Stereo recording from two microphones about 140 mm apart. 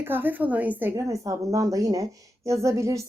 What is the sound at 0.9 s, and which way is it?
Speech, 25° right (ahead or behind).